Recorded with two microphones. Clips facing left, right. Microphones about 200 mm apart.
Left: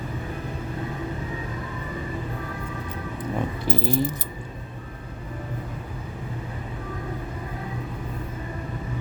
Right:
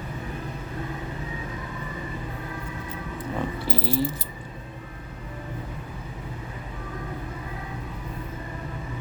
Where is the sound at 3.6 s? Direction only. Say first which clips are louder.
Left 3 dB; 50° left (ahead or behind).